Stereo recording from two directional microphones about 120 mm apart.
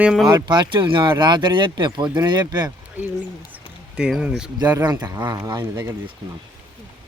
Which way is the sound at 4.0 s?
5° right (ahead or behind).